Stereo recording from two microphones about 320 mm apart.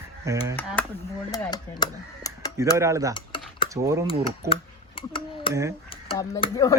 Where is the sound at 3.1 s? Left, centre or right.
Centre.